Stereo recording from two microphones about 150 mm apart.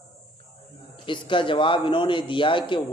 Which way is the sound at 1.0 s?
35° left (ahead or behind).